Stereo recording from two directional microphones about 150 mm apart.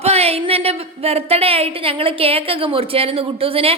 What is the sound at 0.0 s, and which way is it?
A woman's voice, 45° right (ahead or behind).